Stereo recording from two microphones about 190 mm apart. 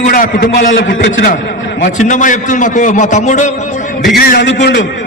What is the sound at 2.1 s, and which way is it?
A man's voice, 45° left (ahead or behind).